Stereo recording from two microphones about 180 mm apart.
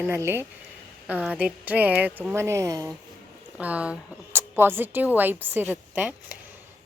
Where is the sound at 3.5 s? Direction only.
5° right (ahead or behind).